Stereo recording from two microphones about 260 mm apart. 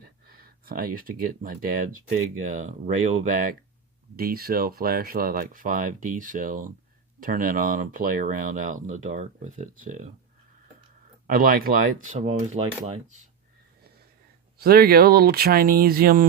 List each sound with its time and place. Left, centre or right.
0.3 s speech: right
11.3 s speech: right
14.6 s speech: right